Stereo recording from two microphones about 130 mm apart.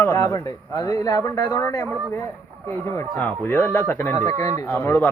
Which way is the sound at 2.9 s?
15° left (ahead or behind).